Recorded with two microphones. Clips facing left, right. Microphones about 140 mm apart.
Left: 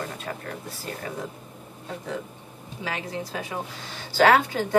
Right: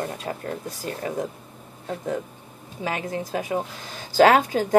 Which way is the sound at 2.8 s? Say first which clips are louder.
Right 4 dB; 45° right (ahead or behind).